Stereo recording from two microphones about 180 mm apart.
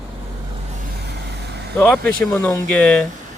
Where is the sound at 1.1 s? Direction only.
70° right (ahead or behind).